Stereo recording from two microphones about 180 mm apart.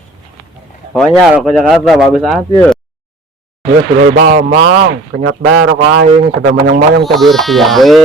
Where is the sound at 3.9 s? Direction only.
55° right (ahead or behind).